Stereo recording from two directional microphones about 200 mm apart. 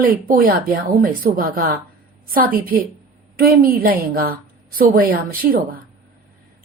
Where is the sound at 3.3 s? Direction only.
45° right (ahead or behind).